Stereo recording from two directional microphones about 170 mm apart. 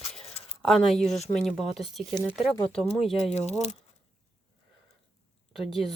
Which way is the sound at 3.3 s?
40° left (ahead or behind).